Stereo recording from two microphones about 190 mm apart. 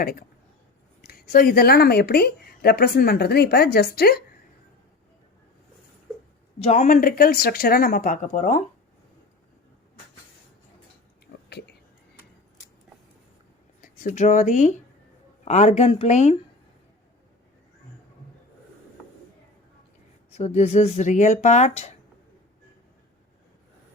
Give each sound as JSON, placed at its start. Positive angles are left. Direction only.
{"t": 0.0, "sound": "speech", "side_deg": 50}
{"t": 6.6, "sound": "speech", "side_deg": 35}
{"t": 11.4, "sound": "a sound", "side_deg": 60}
{"t": 13.8, "sound": "speech", "side_deg": 45}
{"t": 20.3, "sound": "speech", "side_deg": 35}